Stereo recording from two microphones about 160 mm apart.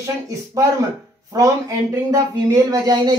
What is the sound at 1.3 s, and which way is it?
Speech, 20° right (ahead or behind).